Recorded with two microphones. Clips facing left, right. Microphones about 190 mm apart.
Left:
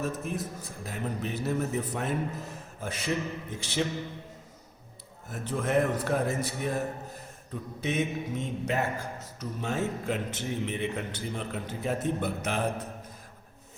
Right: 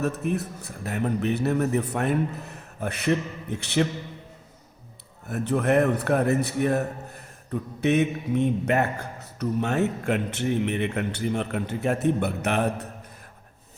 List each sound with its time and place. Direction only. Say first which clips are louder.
0.0 s a man's voice: right 6 dB; 65° right (ahead or behind)
5.3 s a man's voice: right 6 dB; 65° right (ahead or behind)